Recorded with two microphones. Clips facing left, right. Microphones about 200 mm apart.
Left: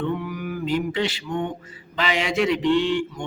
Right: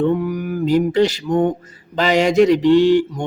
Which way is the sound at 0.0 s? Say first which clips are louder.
Right 8 dB; 40° right (ahead or behind).